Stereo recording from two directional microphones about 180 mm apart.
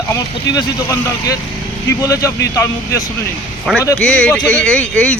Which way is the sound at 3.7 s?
Centre (ahead or behind).